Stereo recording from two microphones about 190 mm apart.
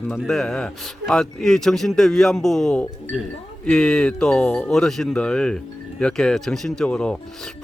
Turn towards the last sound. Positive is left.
turn(degrees=5)  # may be behind; listen again after turning